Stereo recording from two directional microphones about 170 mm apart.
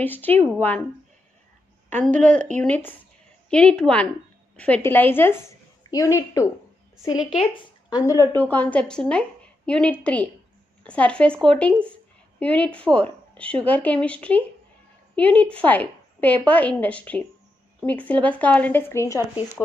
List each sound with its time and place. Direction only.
0.0 s a woman's voice: 10° left (ahead or behind)
2.0 s a woman's voice: 45° right (ahead or behind)
2.6 s a woman's voice: 10° left (ahead or behind)
7.5 s a woman's voice: 20° left (ahead or behind)